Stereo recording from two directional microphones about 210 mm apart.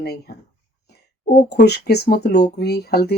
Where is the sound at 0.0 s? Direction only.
50° left (ahead or behind).